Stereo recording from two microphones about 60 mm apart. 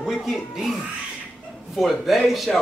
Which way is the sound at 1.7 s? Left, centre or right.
Centre.